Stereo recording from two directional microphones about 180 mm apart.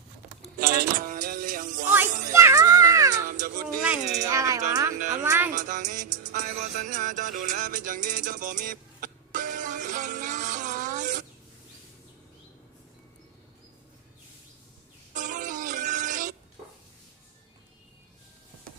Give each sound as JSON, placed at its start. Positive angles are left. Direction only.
{"t": 0.6, "sound": "music", "side_deg": -60}
{"t": 2.3, "sound": "music", "side_deg": -15}
{"t": 3.2, "sound": "music", "side_deg": -50}
{"t": 3.8, "sound": "speech", "side_deg": -5}
{"t": 4.3, "sound": "speech", "side_deg": -15}
{"t": 4.9, "sound": "music", "side_deg": -40}
{"t": 5.2, "sound": "speech", "side_deg": -15}
{"t": 5.5, "sound": "music", "side_deg": -45}
{"t": 15.1, "sound": "synthetic singing", "side_deg": -45}